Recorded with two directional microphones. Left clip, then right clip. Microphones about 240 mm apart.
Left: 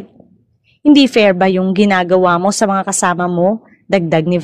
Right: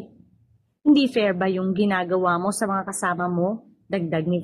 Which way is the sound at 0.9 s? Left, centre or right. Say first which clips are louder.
Left 11 dB; left.